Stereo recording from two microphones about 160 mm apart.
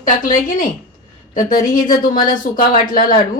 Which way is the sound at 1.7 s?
55° left (ahead or behind).